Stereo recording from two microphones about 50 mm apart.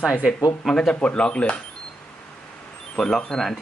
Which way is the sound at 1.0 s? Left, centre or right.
Centre.